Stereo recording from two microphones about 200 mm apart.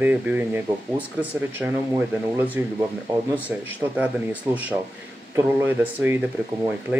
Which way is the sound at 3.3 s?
10° right (ahead or behind).